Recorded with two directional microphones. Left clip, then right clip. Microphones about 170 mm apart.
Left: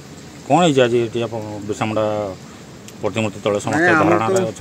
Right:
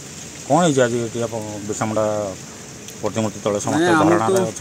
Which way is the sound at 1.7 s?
45° left (ahead or behind).